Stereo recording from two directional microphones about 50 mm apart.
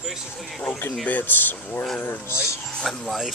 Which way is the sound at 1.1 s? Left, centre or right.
Left.